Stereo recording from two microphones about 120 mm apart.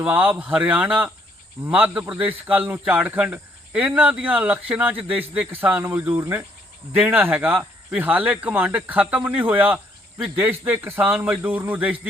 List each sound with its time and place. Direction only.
0.0 s a man's voice: 15° right (ahead or behind)